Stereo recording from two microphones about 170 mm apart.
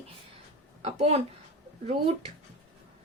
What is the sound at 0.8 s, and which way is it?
Speech, 40° right (ahead or behind).